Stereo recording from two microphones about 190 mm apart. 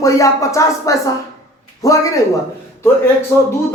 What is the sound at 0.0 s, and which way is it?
Speech, 15° left (ahead or behind).